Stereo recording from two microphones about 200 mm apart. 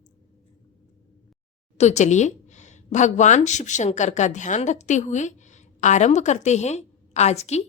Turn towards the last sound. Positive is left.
turn(degrees=35)  # may be behind; listen again after turning